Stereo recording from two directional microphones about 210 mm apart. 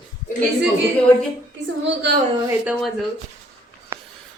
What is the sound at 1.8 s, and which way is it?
Speech, 55° right (ahead or behind).